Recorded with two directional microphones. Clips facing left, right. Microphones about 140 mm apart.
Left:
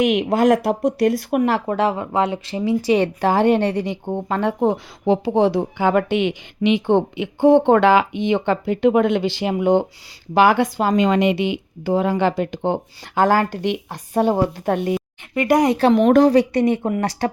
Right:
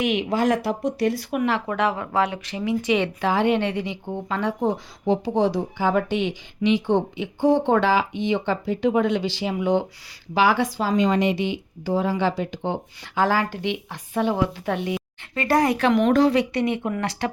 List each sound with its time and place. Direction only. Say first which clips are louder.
0.0 s speech: left 5 dB; 50° left (ahead or behind)
1.4 s speech: left 3 dB; 40° left (ahead or behind); by 4.7 s 55° left (ahead or behind)
5.0 s a woman's voice: left 4 dB; 75° left (ahead or behind); by 10.9 s 55° left (ahead or behind)
10.9 s speech: left 3 dB; 75° left (ahead or behind); by 15.0 s 45° left (ahead or behind)
15.4 s speech: left 4 dB; 15° left (ahead or behind)
16.0 s speech: left 5 dB; 45° left (ahead or behind)